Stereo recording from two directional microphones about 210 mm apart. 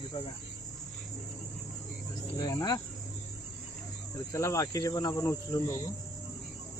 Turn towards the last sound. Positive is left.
turn(degrees=15)  # may be behind; listen again after turning